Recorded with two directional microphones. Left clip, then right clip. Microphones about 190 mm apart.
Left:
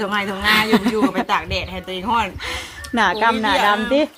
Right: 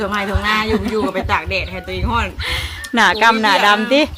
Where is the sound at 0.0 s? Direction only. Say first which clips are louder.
Right 1 dB; 30° left (ahead or behind).